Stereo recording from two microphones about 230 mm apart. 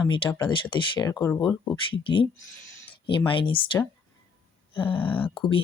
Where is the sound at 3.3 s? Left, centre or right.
Left.